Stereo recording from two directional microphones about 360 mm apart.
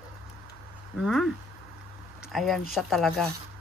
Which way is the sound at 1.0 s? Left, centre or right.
Centre.